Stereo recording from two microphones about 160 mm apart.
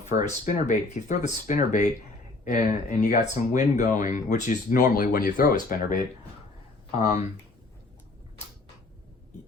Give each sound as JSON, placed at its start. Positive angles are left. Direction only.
{"t": 0.1, "sound": "speech", "side_deg": 50}